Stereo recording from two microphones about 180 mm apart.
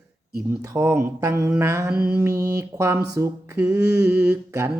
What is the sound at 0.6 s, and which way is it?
Mantra, 15° right (ahead or behind).